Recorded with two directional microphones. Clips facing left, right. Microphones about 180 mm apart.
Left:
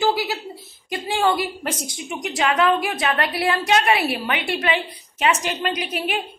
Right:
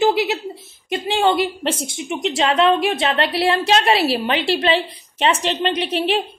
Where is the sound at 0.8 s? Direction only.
25° right (ahead or behind).